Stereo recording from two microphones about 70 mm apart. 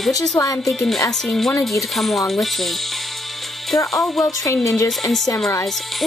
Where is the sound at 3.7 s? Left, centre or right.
Left.